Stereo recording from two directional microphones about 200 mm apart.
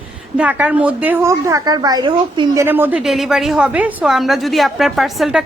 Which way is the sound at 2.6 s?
10° right (ahead or behind).